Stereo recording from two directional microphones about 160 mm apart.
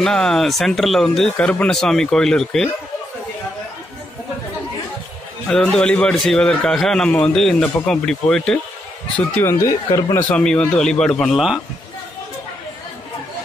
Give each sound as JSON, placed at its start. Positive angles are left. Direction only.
{"t": 0.0, "sound": "a man's voice", "side_deg": 5}
{"t": 5.5, "sound": "a man's voice", "side_deg": 5}
{"t": 9.4, "sound": "speech", "side_deg": 15}
{"t": 10.2, "sound": "a man's voice", "side_deg": 5}